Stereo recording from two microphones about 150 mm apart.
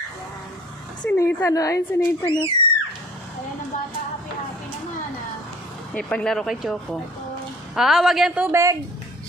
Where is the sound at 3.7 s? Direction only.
55° left (ahead or behind).